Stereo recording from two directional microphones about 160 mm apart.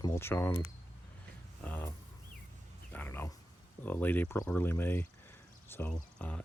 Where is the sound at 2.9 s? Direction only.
10° left (ahead or behind).